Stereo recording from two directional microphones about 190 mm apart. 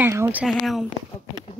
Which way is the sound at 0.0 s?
10° right (ahead or behind).